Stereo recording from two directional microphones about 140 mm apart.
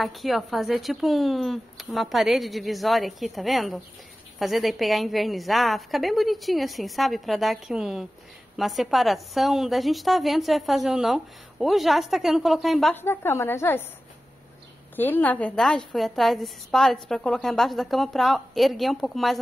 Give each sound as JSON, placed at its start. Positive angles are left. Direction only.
{"t": 0.0, "sound": "a woman's voice", "side_deg": 0}
{"t": 12.9, "sound": "a woman's voice", "side_deg": 15}
{"t": 15.0, "sound": "a woman's voice", "side_deg": 15}